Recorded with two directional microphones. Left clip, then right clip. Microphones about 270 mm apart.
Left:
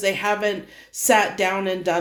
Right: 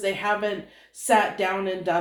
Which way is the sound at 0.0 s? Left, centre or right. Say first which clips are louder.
Left 3 dB; left.